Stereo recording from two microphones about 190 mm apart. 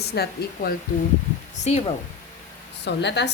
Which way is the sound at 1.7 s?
35° left (ahead or behind).